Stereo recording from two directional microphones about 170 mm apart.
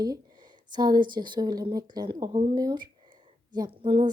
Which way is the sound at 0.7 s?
25° right (ahead or behind).